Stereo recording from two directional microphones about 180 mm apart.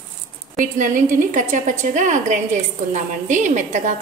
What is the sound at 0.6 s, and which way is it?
A woman's voice, 45° right (ahead or behind).